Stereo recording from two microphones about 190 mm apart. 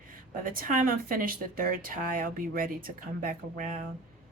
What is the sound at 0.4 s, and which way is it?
Speech, 50° right (ahead or behind).